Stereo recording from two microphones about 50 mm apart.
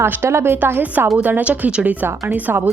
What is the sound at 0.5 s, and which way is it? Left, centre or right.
Speech, right.